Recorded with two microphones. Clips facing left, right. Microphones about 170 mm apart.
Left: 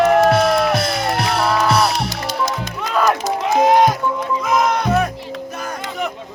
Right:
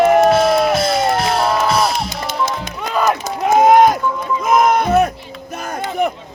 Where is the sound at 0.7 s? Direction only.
20° right (ahead or behind).